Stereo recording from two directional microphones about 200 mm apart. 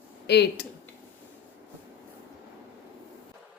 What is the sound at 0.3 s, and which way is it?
Speech, 55° left (ahead or behind).